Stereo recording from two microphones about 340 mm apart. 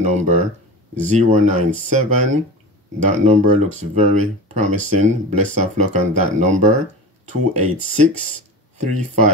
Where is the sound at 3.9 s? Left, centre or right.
Right.